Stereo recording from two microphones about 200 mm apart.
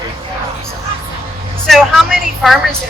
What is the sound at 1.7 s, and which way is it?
A woman's voice, centre (ahead or behind).